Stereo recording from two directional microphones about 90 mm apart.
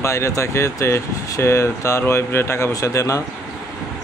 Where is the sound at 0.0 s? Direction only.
30° left (ahead or behind).